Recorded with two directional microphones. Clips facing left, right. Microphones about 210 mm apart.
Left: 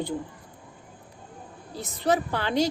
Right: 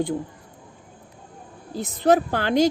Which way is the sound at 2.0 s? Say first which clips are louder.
Right 6 dB; 50° right (ahead or behind).